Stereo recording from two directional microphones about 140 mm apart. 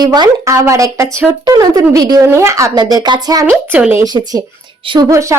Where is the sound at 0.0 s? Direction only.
30° right (ahead or behind).